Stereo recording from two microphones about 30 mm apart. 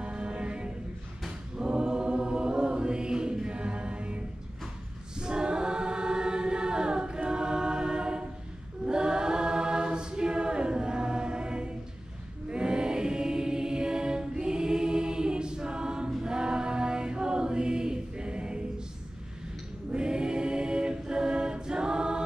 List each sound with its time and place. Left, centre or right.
0.0 s mantra: right
1.6 s choir: right
5.2 s choir: right
8.8 s a capella: right
12.4 s choir: right
16.2 s a capella: right
19.9 s choir: right